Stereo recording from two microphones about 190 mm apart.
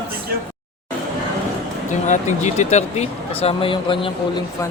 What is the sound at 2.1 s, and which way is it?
Speech, 40° left (ahead or behind).